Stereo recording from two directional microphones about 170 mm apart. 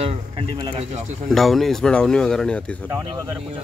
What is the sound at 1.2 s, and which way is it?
Speech, centre (ahead or behind).